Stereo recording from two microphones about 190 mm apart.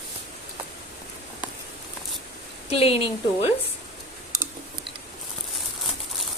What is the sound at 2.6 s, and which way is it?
Speech, 30° left (ahead or behind).